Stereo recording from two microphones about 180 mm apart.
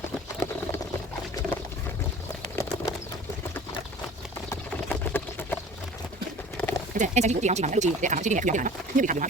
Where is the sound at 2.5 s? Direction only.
15° left (ahead or behind).